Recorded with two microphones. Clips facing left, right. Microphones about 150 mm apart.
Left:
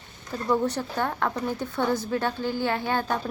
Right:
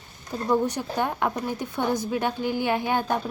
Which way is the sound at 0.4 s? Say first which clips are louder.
Right 1 dB; 15° right (ahead or behind).